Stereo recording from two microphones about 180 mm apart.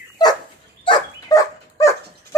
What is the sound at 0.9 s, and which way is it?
Dog, 20° left (ahead or behind).